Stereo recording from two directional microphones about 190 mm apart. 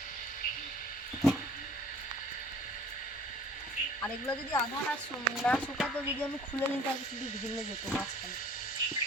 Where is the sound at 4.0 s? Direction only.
10° left (ahead or behind).